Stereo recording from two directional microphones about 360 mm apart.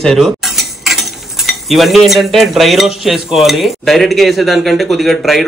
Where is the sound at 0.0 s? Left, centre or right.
Centre.